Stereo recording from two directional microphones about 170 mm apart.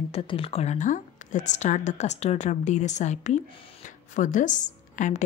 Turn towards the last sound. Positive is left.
turn(degrees=45)  # may be behind; listen again after turning